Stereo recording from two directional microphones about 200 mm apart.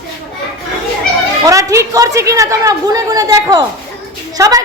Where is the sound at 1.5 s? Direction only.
15° right (ahead or behind).